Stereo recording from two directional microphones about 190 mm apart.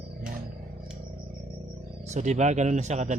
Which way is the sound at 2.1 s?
40° right (ahead or behind).